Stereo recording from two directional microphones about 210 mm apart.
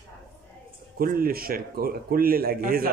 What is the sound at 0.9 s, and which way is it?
Speech, 45° right (ahead or behind).